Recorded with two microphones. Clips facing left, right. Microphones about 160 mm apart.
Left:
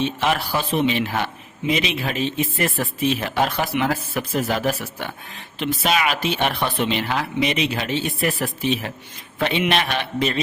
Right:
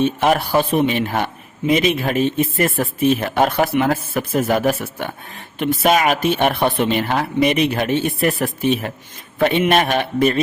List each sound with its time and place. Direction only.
0.0 s speech: 50° right (ahead or behind)